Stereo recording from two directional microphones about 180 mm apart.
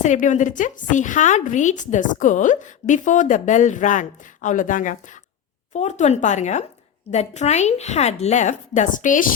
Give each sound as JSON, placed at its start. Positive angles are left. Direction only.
{"t": 0.0, "sound": "a woman's voice", "side_deg": 40}